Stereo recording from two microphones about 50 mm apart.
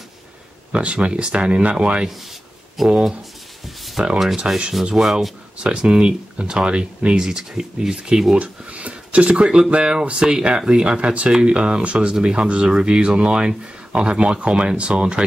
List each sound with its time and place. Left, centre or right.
0.7 s speech: right
2.8 s speech: centre
4.0 s speech: centre
4.8 s speech: centre
8.4 s speech: right